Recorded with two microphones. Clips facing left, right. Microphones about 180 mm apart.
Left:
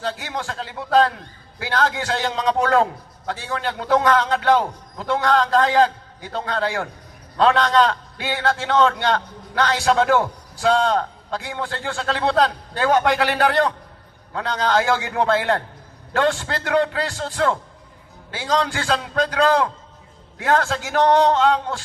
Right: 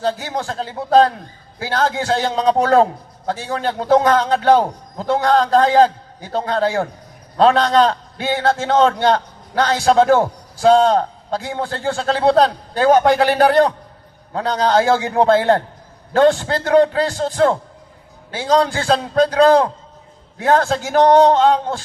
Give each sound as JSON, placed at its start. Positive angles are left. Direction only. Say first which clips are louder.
{"t": 0.0, "sound": "a man's voice", "louder": "right 6 dB", "side_deg": -35}